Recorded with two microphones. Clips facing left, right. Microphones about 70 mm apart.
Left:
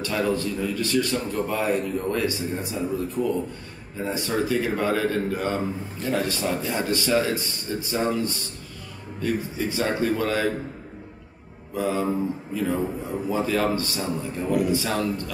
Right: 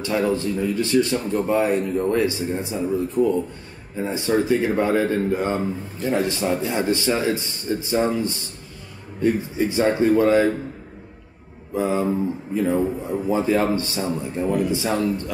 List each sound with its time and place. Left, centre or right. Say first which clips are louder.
0.0 s speech: right 3 dB; right
11.7 s speech: right 3 dB; right